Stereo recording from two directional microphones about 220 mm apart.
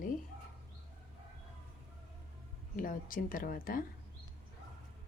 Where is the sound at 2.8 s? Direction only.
40° left (ahead or behind).